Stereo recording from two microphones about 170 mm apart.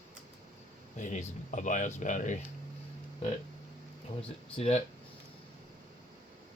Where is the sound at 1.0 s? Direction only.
45° left (ahead or behind).